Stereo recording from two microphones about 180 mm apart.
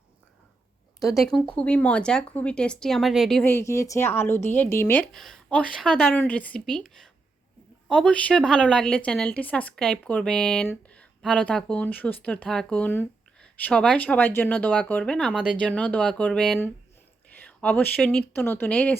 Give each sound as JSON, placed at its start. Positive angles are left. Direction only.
{"t": 0.9, "sound": "speech", "side_deg": 20}
{"t": 1.2, "sound": "a woman's voice", "side_deg": 5}
{"t": 3.4, "sound": "a woman's voice", "side_deg": 15}